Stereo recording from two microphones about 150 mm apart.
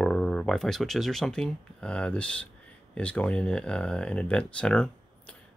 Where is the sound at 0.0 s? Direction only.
5° left (ahead or behind).